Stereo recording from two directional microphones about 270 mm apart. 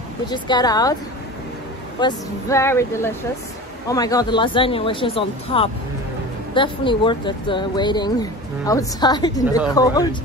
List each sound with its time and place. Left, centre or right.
0.3 s speech: centre
2.0 s speech: centre